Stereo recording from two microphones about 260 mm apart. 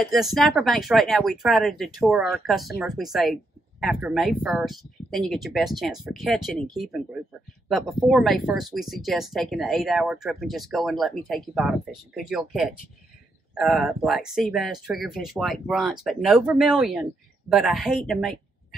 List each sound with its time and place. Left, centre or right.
0.0 s speech: centre